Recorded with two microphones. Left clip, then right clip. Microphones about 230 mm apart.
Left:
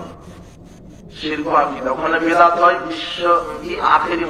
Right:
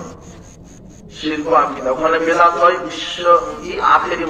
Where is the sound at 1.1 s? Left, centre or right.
Left.